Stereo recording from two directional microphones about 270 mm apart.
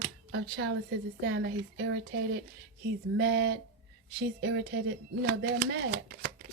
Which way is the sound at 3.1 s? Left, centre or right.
Right.